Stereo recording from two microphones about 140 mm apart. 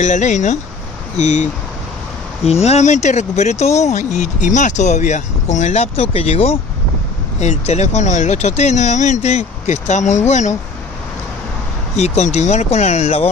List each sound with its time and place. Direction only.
0.0 s speech: 60° left (ahead or behind)
12.0 s speech: 55° left (ahead or behind)